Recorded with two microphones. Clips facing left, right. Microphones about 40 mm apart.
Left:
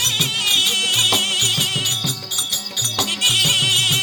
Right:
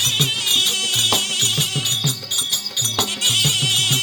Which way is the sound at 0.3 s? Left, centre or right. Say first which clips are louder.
Left 2 dB; left.